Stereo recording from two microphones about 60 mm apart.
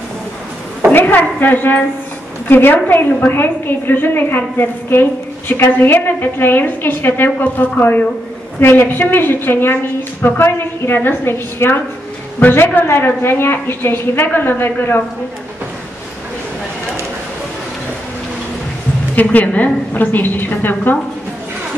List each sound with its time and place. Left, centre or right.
0.9 s a sound: left
2.4 s a woman's voice: left
19.1 s a woman's voice: left